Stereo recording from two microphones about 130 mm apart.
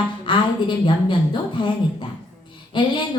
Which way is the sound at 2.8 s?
35° left (ahead or behind).